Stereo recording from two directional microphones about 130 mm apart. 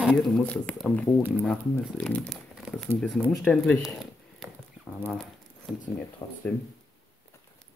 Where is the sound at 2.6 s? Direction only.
Centre (ahead or behind).